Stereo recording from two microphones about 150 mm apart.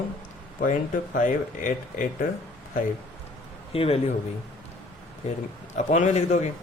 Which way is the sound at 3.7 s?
40° left (ahead or behind).